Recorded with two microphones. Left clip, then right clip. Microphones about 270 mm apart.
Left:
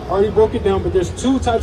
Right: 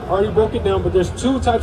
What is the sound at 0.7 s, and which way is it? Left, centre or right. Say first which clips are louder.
Speech: even; left.